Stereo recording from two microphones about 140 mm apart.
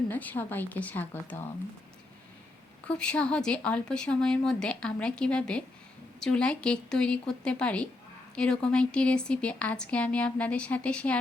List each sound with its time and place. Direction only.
0.1 s speech: 10° left (ahead or behind)
2.8 s speech: 5° left (ahead or behind)